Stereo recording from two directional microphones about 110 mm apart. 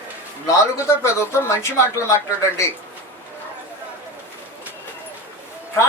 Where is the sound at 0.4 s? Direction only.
25° left (ahead or behind).